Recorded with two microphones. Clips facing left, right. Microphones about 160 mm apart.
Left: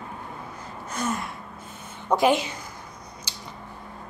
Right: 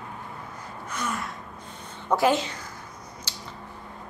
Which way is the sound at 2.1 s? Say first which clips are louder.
Left 1 dB; 15° left (ahead or behind).